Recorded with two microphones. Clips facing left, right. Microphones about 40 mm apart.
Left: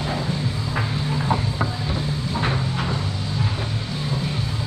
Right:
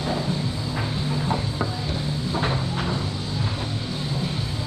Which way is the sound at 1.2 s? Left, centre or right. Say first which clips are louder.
Left 2 dB; centre.